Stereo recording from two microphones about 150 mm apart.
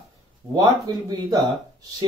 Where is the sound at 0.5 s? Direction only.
25° right (ahead or behind).